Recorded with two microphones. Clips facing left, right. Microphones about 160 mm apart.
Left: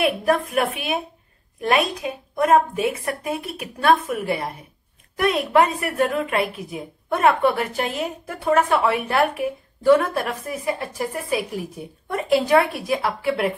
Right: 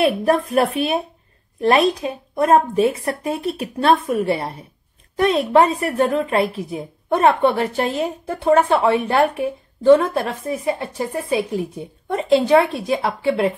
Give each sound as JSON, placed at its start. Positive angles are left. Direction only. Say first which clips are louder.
{"t": 0.0, "sound": "a woman's voice", "louder": "right 3 dB", "side_deg": -30}